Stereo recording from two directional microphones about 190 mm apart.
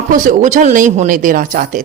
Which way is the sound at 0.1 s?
40° right (ahead or behind).